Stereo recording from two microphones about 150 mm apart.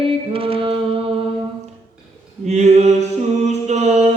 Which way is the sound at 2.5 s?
50° right (ahead or behind).